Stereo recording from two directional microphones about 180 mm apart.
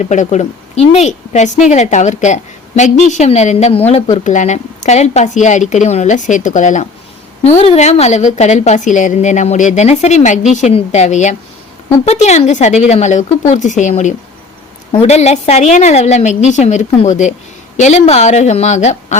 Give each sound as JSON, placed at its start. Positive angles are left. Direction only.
{"t": 0.0, "sound": "a woman's voice", "side_deg": 40}